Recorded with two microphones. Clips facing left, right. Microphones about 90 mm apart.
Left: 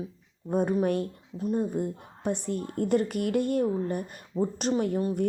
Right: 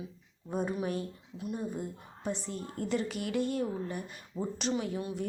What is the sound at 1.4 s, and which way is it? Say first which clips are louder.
A woman's voice: left 8 dB; 40° left (ahead or behind).